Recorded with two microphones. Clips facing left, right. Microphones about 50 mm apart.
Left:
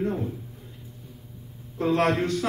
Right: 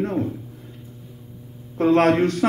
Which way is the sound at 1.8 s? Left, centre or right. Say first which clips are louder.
Right 6 dB; right.